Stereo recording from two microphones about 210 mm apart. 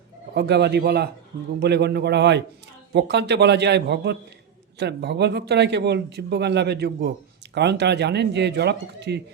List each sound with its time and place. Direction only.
0.3 s speech: 50° right (ahead or behind)